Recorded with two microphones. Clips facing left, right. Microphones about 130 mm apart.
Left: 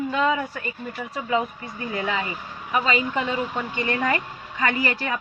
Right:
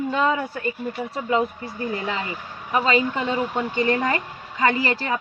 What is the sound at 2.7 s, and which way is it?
A woman's voice, 35° right (ahead or behind).